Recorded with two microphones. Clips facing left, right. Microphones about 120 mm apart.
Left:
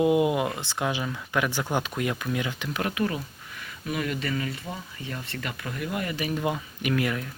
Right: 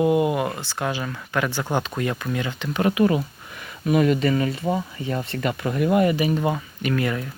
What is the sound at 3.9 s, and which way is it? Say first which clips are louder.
Speech: right 10 dB; 25° right (ahead or behind).